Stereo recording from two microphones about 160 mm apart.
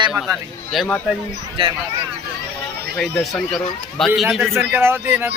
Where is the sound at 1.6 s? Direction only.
35° right (ahead or behind).